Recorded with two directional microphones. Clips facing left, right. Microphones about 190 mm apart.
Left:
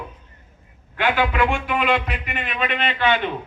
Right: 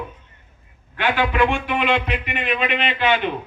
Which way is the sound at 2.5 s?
15° right (ahead or behind).